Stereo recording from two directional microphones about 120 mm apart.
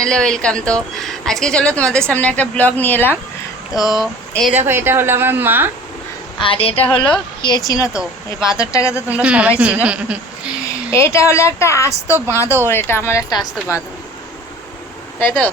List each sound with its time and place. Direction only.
0.0 s speech: 5° left (ahead or behind)
3.7 s a sound: centre (ahead or behind)
4.5 s a woman's voice: 20° right (ahead or behind)
6.4 s speech: 50° left (ahead or behind)
7.4 s speech: 40° left (ahead or behind)
7.9 s speech: 5° right (ahead or behind)
8.5 s a woman's voice: 25° left (ahead or behind)
9.0 s a woman's voice: 10° right (ahead or behind)
10.9 s a woman's voice: 25° left (ahead or behind)
15.2 s speech: 15° left (ahead or behind)